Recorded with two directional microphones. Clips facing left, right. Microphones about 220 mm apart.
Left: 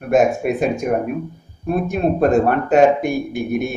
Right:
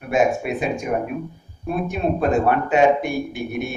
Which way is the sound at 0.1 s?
45° left (ahead or behind).